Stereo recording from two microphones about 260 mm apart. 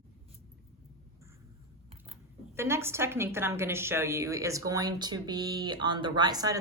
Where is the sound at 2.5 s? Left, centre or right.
Centre.